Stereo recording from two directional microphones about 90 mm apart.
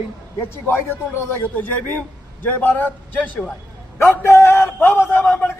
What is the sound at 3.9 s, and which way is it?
A man's voice, 30° left (ahead or behind).